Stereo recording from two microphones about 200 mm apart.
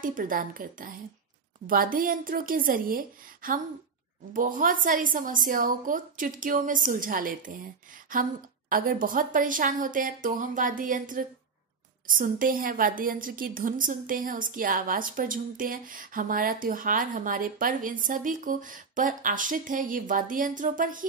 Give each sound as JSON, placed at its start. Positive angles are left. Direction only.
{"t": 0.0, "sound": "a woman's voice", "side_deg": -45}